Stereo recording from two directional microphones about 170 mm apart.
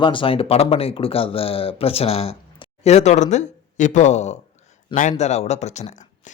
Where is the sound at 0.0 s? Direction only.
30° left (ahead or behind).